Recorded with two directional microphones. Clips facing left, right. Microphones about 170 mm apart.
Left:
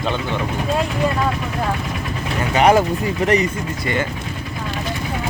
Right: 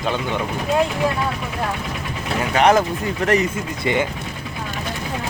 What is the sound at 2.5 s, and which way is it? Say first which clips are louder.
Speech: left 2 dB; 5° left (ahead or behind).